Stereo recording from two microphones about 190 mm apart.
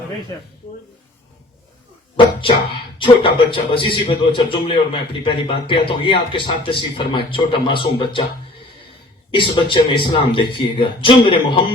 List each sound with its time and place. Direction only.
3.0 s a man's voice: 25° left (ahead or behind)
9.3 s a man's voice: 25° left (ahead or behind)